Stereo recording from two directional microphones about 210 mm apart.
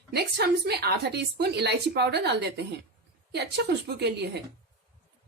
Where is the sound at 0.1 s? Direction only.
50° right (ahead or behind).